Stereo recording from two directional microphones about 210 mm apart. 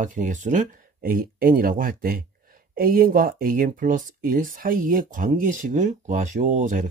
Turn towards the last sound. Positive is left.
turn(degrees=-40)  # may be behind; listen again after turning